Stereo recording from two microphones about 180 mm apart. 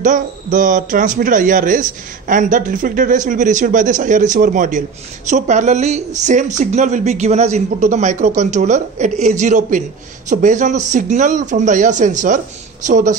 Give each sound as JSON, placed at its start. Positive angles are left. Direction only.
{"t": 0.0, "sound": "speech", "side_deg": -45}